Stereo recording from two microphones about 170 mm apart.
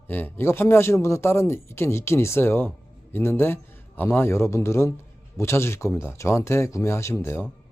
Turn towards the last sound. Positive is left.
turn(degrees=15)  # may be behind; listen again after turning